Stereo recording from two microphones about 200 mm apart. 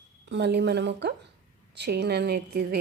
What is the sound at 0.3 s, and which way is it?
A woman's voice, 55° right (ahead or behind).